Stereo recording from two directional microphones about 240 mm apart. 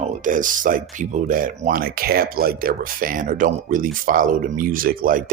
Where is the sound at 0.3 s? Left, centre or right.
Right.